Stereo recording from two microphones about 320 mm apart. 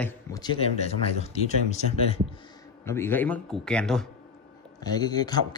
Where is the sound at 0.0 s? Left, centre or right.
Centre.